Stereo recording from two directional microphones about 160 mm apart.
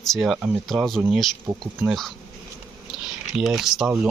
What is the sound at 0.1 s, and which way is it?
Speech, centre (ahead or behind).